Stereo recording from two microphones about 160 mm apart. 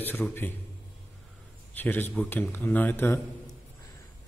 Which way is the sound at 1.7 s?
10° left (ahead or behind).